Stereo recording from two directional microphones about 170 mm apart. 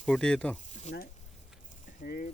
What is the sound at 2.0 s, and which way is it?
Speech, 55° left (ahead or behind).